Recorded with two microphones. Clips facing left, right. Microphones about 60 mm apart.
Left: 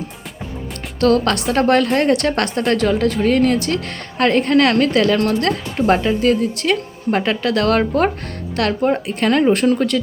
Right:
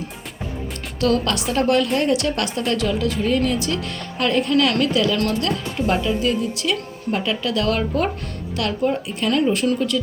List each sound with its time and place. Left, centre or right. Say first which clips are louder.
0.9 s speech: left 5 dB; left